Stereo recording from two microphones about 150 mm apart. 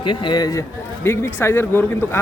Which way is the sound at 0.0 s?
30° left (ahead or behind).